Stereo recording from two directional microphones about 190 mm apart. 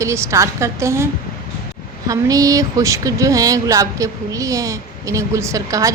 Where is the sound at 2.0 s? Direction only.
20° right (ahead or behind).